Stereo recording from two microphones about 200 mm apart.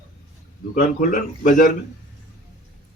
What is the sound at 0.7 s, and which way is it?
Speech, 40° left (ahead or behind).